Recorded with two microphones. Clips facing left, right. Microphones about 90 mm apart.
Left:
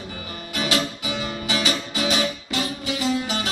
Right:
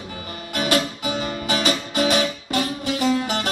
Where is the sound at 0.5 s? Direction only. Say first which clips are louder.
Right 3 dB; 45° right (ahead or behind).